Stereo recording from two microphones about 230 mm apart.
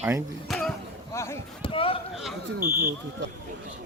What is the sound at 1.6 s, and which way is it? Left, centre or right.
Rowboat, left.